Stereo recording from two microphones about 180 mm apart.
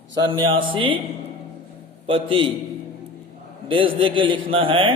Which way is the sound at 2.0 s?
30° right (ahead or behind).